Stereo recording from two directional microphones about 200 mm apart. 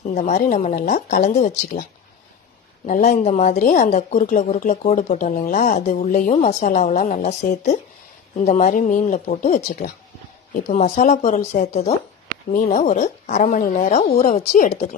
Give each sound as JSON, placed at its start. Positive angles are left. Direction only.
{"t": 0.0, "sound": "speech", "side_deg": 35}
{"t": 2.9, "sound": "speech", "side_deg": 35}
{"t": 8.4, "sound": "speech", "side_deg": 35}